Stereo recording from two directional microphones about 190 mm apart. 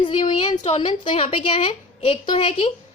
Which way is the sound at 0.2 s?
35° left (ahead or behind).